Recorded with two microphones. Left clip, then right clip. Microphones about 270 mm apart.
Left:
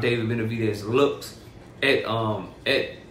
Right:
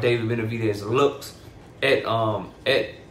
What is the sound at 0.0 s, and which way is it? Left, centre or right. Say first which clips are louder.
Speech: right 2 dB; centre.